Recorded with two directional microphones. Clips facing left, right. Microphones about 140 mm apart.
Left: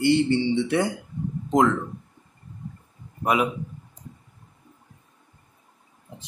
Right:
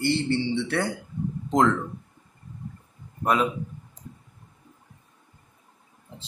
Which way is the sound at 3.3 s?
10° left (ahead or behind).